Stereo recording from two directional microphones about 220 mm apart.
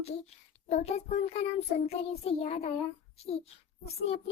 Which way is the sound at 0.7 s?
30° left (ahead or behind).